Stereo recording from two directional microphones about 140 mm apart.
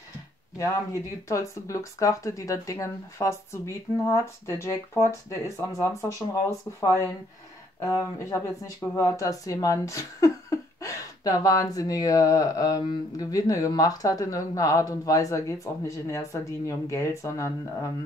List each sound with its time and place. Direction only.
1.3 s speech: 20° left (ahead or behind)